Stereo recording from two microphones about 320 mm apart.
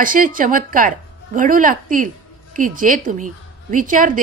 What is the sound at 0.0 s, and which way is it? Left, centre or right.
A woman's voice, right.